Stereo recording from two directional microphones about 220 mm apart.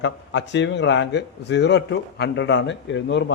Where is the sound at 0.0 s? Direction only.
55° left (ahead or behind).